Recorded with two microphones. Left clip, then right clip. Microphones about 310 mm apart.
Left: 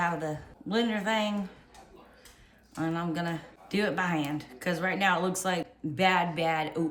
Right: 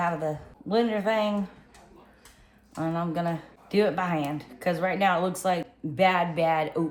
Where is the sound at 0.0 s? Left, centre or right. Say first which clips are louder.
Right 3 dB; centre.